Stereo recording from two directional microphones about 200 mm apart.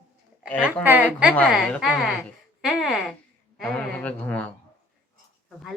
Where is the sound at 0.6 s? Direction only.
10° right (ahead or behind).